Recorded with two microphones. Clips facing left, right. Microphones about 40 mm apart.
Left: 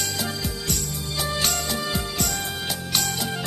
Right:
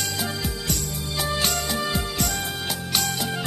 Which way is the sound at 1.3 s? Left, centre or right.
Centre.